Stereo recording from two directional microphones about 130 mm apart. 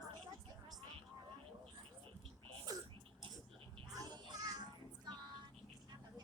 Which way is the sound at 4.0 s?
35° right (ahead or behind).